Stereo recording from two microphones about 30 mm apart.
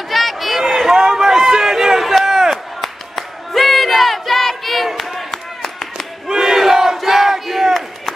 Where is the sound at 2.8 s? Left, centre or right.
Centre.